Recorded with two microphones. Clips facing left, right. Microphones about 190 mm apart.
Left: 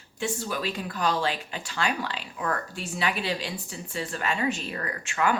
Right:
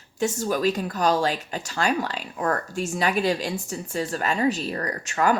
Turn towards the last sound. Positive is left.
turn(degrees=-40)  # may be behind; listen again after turning